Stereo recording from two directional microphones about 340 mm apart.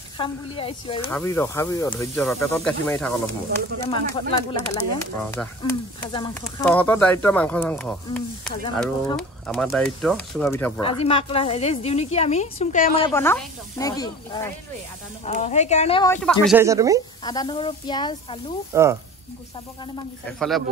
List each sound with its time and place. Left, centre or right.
0.2 s a woman's voice: centre
3.9 s a woman's voice: centre
10.8 s a woman's voice: centre
17.2 s a woman's voice: centre
18.7 s speech: centre